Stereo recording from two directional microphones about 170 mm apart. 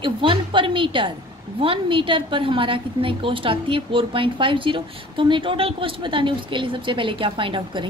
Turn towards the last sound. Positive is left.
turn(degrees=-30)  # may be behind; listen again after turning